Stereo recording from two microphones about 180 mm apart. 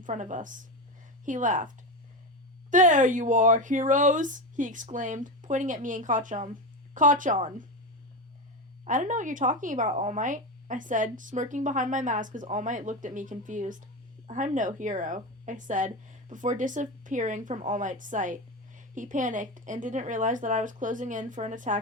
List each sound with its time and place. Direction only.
0.0 s speech: 45° right (ahead or behind)
8.8 s speech: 45° right (ahead or behind)